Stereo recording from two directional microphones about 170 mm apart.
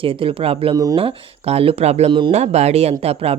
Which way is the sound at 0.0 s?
30° right (ahead or behind).